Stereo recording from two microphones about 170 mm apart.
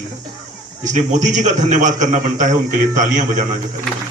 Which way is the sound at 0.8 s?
45° right (ahead or behind).